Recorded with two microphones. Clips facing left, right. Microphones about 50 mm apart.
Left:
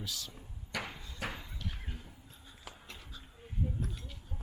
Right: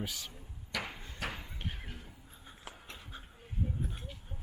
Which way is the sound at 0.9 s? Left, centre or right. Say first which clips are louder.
Even; right.